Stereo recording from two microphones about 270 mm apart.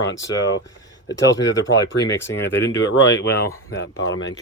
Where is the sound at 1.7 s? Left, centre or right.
Left.